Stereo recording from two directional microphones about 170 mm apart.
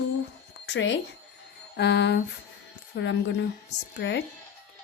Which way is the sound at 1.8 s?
80° left.